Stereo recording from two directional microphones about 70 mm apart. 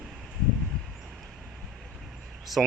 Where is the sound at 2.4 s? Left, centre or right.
Centre.